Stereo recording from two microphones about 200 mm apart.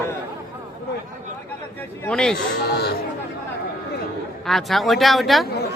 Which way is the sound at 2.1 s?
5° left (ahead or behind).